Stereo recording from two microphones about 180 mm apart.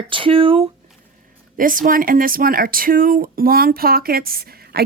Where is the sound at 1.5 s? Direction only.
50° right (ahead or behind).